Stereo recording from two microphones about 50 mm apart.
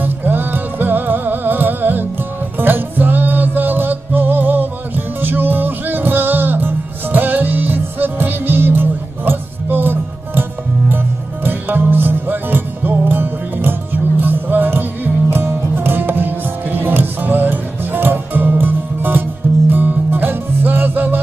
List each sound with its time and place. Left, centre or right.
0.0 s music: right
11.4 s music: right